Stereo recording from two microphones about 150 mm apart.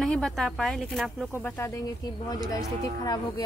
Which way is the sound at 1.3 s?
15° left (ahead or behind).